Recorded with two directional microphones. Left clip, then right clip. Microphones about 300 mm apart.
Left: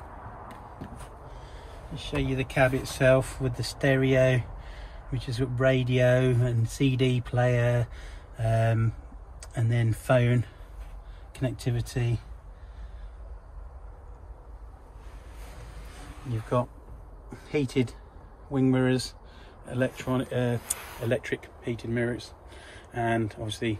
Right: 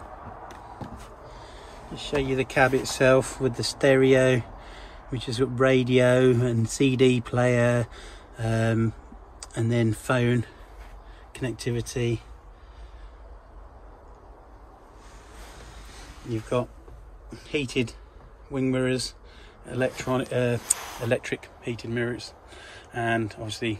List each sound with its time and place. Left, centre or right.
1.4 s speech: centre
17.5 s speech: centre